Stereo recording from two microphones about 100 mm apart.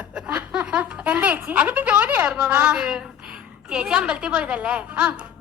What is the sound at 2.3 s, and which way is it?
A man's voice, 10° right (ahead or behind).